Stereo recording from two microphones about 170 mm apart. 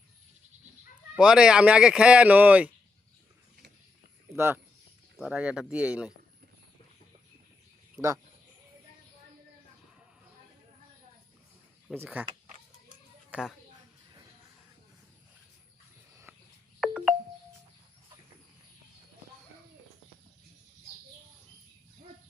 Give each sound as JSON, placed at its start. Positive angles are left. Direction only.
{"t": 1.1, "sound": "speech", "side_deg": -5}
{"t": 4.3, "sound": "speech", "side_deg": -15}
{"t": 5.1, "sound": "speech", "side_deg": -5}
{"t": 7.9, "sound": "speech", "side_deg": -15}
{"t": 11.9, "sound": "speech", "side_deg": -10}
{"t": 16.3, "sound": "a sound", "side_deg": -10}
{"t": 16.8, "sound": "music", "side_deg": -5}